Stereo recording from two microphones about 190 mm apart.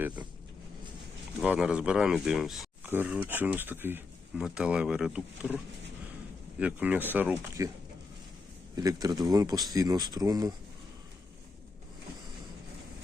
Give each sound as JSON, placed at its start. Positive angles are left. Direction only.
{"t": 1.4, "sound": "speech", "side_deg": -5}
{"t": 6.6, "sound": "speech", "side_deg": -5}
{"t": 8.7, "sound": "speech", "side_deg": -20}